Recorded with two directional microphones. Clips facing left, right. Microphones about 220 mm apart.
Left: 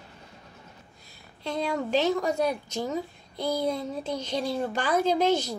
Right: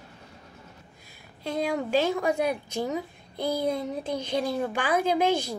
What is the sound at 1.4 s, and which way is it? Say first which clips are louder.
A woman's voice: right 1 dB; 10° right (ahead or behind).